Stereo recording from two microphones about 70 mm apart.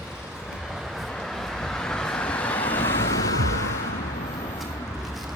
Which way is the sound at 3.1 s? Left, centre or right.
Left.